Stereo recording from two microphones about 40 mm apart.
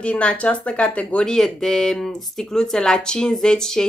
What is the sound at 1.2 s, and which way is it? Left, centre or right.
Speech, centre.